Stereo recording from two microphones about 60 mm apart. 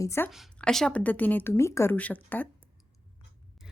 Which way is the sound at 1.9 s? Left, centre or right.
Left.